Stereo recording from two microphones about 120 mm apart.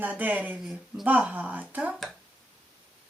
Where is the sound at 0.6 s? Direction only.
Centre (ahead or behind).